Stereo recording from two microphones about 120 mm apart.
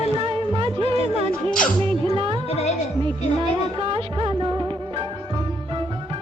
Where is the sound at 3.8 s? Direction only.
50° right (ahead or behind).